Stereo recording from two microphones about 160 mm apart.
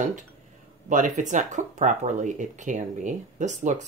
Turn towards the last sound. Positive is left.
turn(degrees=-50)  # may be behind; listen again after turning